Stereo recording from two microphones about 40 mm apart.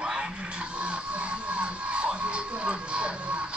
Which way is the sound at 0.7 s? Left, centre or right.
Right.